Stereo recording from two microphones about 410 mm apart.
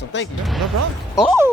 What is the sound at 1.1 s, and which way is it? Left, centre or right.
Music, centre.